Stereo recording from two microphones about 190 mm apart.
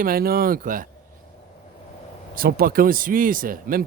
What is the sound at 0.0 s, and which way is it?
Speech, 50° right (ahead or behind).